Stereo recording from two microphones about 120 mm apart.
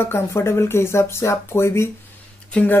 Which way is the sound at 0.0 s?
20° left (ahead or behind).